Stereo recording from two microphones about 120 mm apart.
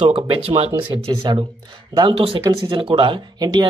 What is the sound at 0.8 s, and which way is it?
A man's voice, 45° right (ahead or behind).